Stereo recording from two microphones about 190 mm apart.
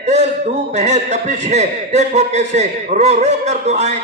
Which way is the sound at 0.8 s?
35° right (ahead or behind).